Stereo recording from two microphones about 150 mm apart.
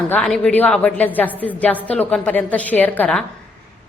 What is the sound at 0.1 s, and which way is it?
A woman's voice, 5° left (ahead or behind).